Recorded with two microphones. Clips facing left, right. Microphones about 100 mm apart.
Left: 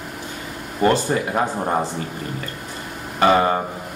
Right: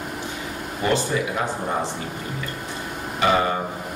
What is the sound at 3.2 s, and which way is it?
Speech, 40° left (ahead or behind).